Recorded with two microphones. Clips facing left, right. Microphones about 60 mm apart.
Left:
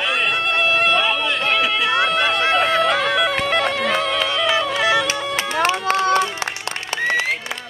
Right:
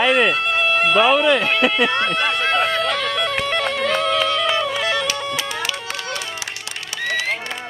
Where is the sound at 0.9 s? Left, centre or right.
Right.